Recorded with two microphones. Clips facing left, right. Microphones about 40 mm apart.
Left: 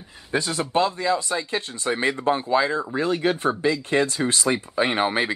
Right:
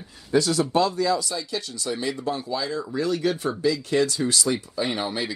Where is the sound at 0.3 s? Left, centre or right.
Left.